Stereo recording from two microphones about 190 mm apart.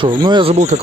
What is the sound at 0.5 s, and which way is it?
Speech, 35° right (ahead or behind).